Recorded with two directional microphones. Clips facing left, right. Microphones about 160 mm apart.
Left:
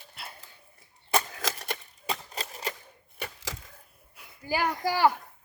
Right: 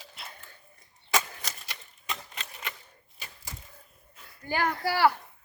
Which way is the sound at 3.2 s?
90° left.